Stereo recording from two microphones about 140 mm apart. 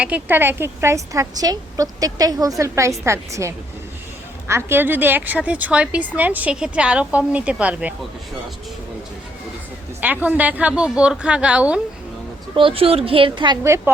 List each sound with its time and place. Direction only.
0.0 s a woman's voice: 10° right (ahead or behind)
10.0 s a woman's voice: 10° right (ahead or behind)
12.5 s a woman's voice: 40° right (ahead or behind)
13.7 s a woman's voice: 20° right (ahead or behind)